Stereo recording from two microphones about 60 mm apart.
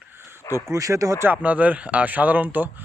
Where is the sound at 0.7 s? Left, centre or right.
Right.